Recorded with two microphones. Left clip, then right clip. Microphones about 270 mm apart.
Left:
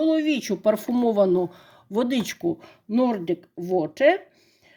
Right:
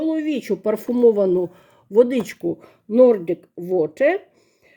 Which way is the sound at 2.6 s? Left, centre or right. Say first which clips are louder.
Right 10 dB; centre.